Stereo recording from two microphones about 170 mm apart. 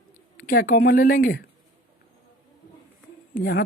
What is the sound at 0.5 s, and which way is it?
Speech, 60° left (ahead or behind).